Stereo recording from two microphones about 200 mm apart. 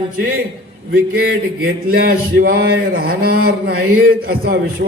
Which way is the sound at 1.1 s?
50° right (ahead or behind).